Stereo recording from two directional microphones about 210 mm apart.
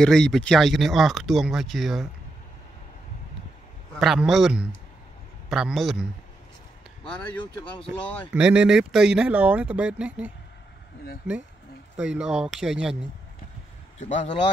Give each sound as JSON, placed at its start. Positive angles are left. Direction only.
{"t": 0.0, "sound": "speech", "side_deg": 5}
{"t": 3.9, "sound": "speech", "side_deg": 0}
{"t": 8.3, "sound": "speech", "side_deg": -5}
{"t": 14.0, "sound": "speech", "side_deg": 30}